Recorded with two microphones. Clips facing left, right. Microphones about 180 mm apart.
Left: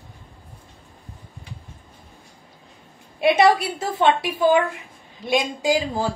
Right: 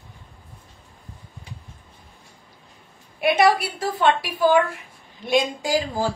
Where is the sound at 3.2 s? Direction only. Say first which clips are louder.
Left 2 dB; 25° left (ahead or behind).